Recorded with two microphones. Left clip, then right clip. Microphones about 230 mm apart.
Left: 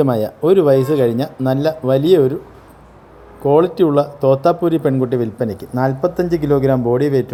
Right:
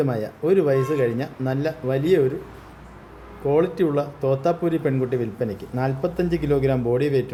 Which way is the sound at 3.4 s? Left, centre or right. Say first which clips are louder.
Left 7 dB; left.